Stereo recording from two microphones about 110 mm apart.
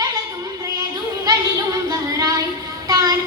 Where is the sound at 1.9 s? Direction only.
30° right (ahead or behind).